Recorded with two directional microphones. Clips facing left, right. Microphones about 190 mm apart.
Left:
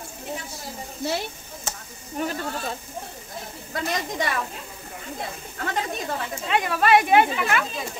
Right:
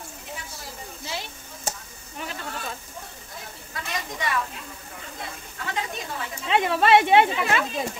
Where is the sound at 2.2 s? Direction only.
45° left (ahead or behind).